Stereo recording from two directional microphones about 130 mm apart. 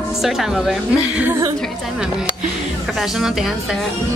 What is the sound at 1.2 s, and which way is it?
Speech, 20° right (ahead or behind).